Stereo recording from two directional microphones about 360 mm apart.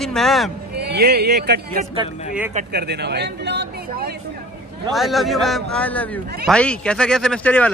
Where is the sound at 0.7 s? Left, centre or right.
Right.